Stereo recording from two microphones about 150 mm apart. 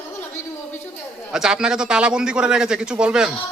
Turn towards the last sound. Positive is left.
turn(degrees=-5)  # may be behind; listen again after turning